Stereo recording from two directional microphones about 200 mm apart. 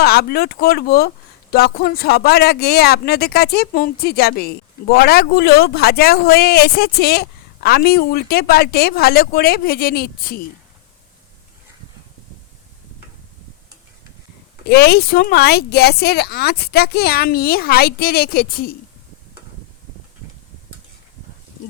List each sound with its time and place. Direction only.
0.0 s speech: 50° left (ahead or behind)
14.7 s speech: 55° left (ahead or behind)